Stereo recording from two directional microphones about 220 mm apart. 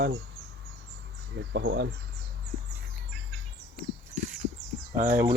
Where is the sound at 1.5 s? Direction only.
50° right (ahead or behind).